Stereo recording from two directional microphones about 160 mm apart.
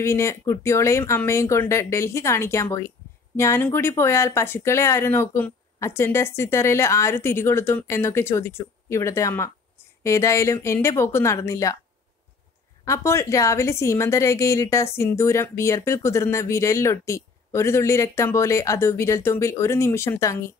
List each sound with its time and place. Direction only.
0.0 s a woman's voice: 15° left (ahead or behind)
12.8 s a woman's voice: 15° left (ahead or behind)